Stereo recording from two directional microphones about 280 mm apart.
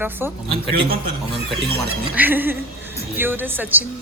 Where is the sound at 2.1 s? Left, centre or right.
Centre.